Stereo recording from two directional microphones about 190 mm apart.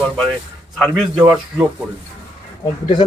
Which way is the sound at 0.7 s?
Centre (ahead or behind).